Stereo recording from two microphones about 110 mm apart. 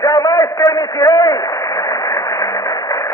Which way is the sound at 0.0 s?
35° left (ahead or behind).